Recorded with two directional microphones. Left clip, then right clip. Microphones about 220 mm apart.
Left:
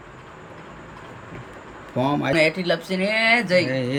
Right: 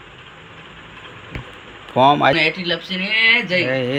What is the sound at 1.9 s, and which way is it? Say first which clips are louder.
Speech: right 7 dB; 5° left (ahead or behind).